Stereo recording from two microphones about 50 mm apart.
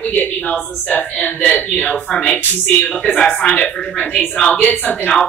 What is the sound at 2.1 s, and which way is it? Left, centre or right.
A woman's voice, centre.